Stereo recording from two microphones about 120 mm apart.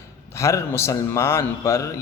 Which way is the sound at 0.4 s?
20° left (ahead or behind).